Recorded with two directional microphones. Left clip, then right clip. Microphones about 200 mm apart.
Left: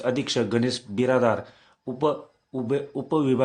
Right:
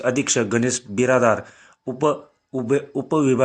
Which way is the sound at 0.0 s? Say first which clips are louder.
Right 4 dB; 10° right (ahead or behind).